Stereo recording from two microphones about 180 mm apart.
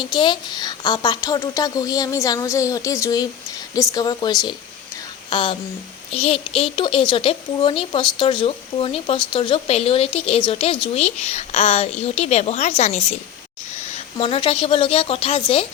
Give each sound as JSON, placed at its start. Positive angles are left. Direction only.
{"t": 0.0, "sound": "a woman's voice", "side_deg": 25}